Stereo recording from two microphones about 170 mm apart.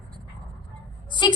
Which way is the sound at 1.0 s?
25° left (ahead or behind).